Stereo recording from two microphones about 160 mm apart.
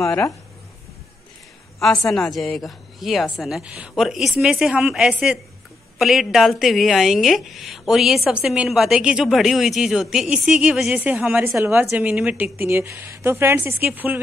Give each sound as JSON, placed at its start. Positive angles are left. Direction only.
{"t": 0.0, "sound": "speech", "side_deg": 15}
{"t": 1.8, "sound": "a woman's voice", "side_deg": 0}